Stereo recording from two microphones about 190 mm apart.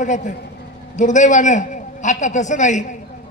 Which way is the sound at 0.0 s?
40° left (ahead or behind).